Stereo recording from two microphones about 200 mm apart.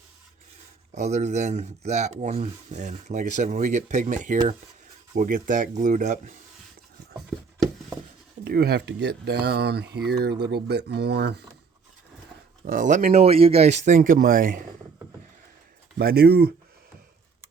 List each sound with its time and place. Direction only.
0.9 s speech: 35° right (ahead or behind)
8.4 s speech: 50° right (ahead or behind)
12.6 s speech: 40° right (ahead or behind)
16.0 s speech: 50° right (ahead or behind)